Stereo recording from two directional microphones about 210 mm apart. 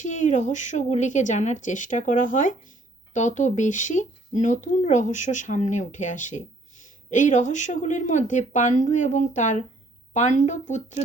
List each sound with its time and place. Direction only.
0.0 s speech: 35° left (ahead or behind)